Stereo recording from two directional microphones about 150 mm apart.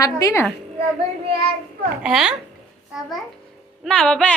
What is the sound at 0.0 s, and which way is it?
Speech, 20° left (ahead or behind).